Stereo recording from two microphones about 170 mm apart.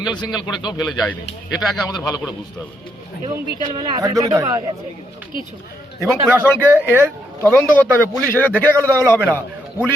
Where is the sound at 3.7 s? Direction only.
25° right (ahead or behind).